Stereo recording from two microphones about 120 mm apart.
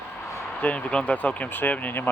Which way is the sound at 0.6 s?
10° left (ahead or behind).